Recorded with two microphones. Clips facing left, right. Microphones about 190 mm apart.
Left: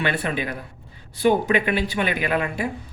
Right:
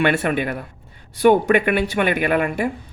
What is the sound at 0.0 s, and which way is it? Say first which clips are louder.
Speech: right 6 dB; 55° right (ahead or behind).